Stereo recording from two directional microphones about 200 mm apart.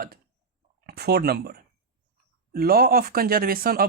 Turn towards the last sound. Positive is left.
turn(degrees=-50)  # may be behind; listen again after turning